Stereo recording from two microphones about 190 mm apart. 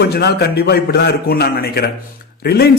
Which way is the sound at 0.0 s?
60° left (ahead or behind).